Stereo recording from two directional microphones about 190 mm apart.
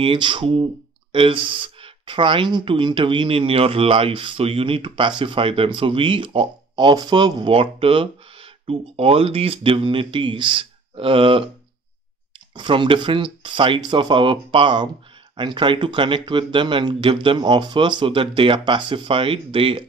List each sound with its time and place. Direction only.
0.0 s speech: 25° right (ahead or behind)
12.5 s speech: 25° right (ahead or behind)